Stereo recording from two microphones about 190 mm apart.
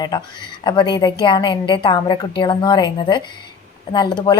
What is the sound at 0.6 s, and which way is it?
A woman's voice, 25° left (ahead or behind).